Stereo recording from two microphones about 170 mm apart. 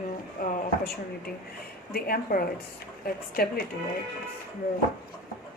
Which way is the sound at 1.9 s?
60° left (ahead or behind).